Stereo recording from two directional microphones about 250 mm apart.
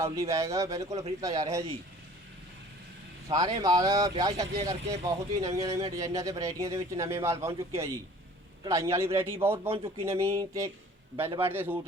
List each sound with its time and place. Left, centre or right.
0.0 s speech: centre
3.2 s speech: centre
9.6 s speech: right
10.0 s speech: centre